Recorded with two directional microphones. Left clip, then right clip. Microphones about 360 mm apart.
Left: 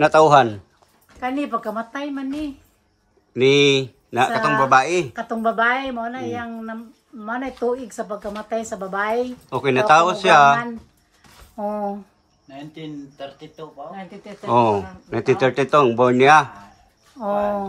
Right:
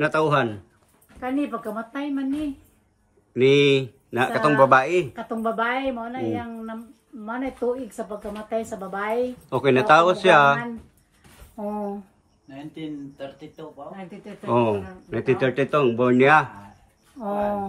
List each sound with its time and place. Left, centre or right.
0.0 s speech: centre
1.2 s speech: left
3.3 s a man's voice: centre
5.1 s speech: left
9.5 s a man's voice: centre
11.5 s speech: left
14.4 s speech: centre
17.2 s speech: left